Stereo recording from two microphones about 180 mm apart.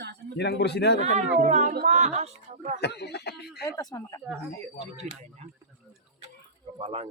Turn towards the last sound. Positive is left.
turn(degrees=-35)  # may be behind; listen again after turning